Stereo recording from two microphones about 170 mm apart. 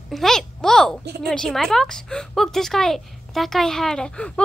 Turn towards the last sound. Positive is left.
turn(degrees=5)  # may be behind; listen again after turning